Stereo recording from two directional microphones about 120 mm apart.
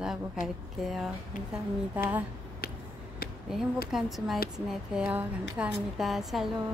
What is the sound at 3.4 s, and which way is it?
A woman's voice, centre (ahead or behind).